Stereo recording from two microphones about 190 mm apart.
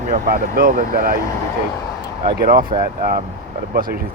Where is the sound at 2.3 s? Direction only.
55° right (ahead or behind).